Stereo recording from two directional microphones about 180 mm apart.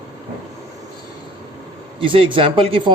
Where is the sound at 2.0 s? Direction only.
30° right (ahead or behind).